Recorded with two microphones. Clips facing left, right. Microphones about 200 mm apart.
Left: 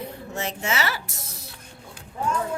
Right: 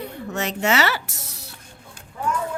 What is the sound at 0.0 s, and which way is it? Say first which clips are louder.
Speech: right 3 dB; 70° right (ahead or behind).